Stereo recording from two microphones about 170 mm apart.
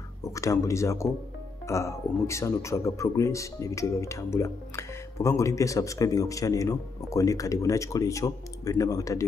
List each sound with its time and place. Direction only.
0.2 s speech: 20° left (ahead or behind)